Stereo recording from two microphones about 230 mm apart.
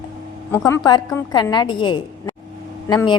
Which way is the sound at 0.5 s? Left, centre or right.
Centre.